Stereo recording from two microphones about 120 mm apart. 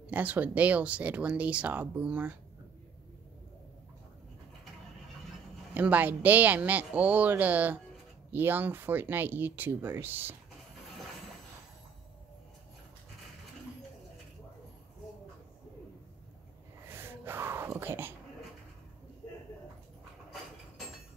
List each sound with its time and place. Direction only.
0.1 s speech: 15° right (ahead or behind)
5.8 s speech: 15° right (ahead or behind)
16.8 s whispering: 20° right (ahead or behind)